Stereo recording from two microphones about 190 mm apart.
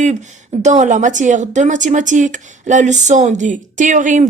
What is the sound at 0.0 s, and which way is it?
Speech, 40° right (ahead or behind).